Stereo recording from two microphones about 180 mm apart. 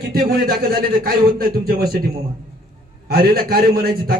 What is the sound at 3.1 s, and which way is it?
Speech, 55° right (ahead or behind).